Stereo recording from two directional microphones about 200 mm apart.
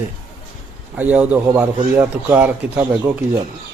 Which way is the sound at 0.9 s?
5° right (ahead or behind).